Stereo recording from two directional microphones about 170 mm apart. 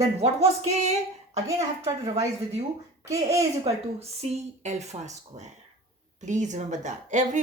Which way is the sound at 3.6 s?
40° right (ahead or behind).